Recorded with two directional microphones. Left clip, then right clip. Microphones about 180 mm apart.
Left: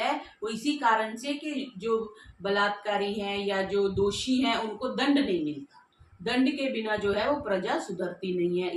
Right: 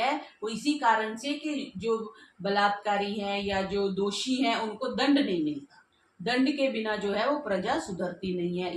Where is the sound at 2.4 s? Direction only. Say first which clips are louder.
Right 1 dB; 15° left (ahead or behind).